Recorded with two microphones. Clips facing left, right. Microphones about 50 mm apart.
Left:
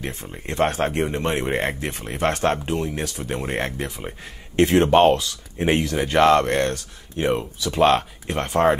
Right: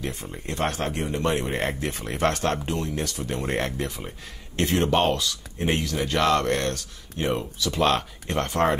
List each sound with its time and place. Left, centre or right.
0.0 s speech: left; by 8.7 s centre